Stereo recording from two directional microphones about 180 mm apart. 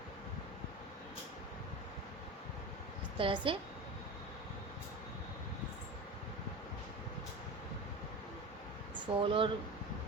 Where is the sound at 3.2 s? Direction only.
30° right (ahead or behind).